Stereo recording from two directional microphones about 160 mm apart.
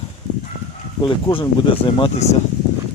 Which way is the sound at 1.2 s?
30° left (ahead or behind).